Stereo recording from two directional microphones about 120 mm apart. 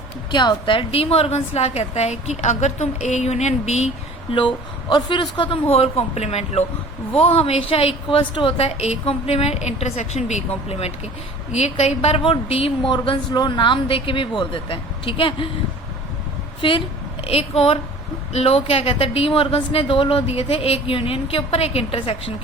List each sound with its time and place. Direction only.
0.3 s a woman's voice: 40° left (ahead or behind); by 3.9 s 70° left (ahead or behind)
4.3 s a woman's voice: 45° left (ahead or behind)
5.7 s a woman's voice: 55° left (ahead or behind)
7.1 s a woman's voice: 55° left (ahead or behind); by 10.4 s 70° left (ahead or behind)
10.7 s a woman's voice: 60° left (ahead or behind)
16.6 s a woman's voice: 45° left (ahead or behind)
17.2 s a woman's voice: 55° left (ahead or behind)